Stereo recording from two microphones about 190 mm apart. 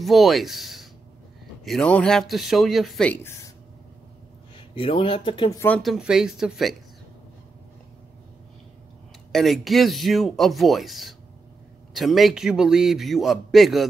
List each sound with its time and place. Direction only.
0.0 s a man's voice: centre (ahead or behind)
4.6 s speech: 25° left (ahead or behind)
5.8 s a man's voice: centre (ahead or behind)
9.3 s a man's voice: centre (ahead or behind)